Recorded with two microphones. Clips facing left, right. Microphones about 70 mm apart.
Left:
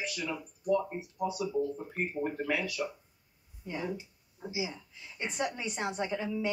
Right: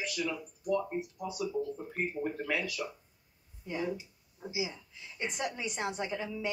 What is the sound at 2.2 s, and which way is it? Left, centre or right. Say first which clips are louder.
Speech: left 1 dB; centre.